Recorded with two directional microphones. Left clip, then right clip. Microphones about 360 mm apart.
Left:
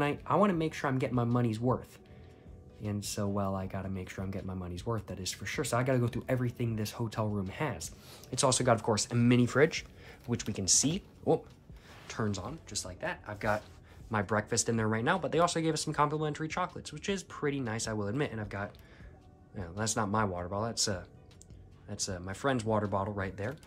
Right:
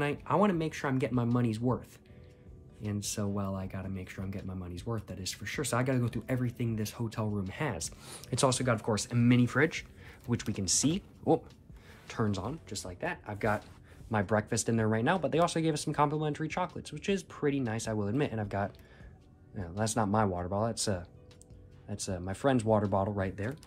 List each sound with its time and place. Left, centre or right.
0.0 s speech: centre
7.8 s speech: centre
8.5 s speech: centre